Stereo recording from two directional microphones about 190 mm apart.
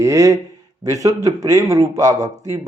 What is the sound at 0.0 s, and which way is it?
Speech, 15° right (ahead or behind).